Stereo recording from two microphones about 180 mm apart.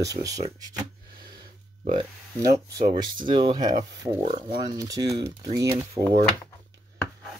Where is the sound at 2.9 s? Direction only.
25° right (ahead or behind).